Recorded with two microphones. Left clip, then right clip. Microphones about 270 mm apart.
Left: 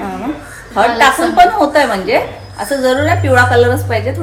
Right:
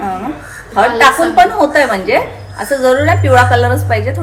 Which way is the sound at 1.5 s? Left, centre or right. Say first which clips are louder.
Right 1 dB; centre.